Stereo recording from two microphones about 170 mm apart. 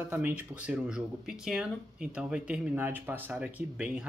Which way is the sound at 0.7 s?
5° right (ahead or behind).